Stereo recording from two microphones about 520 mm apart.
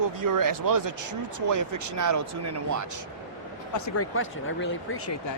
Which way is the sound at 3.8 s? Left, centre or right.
Left.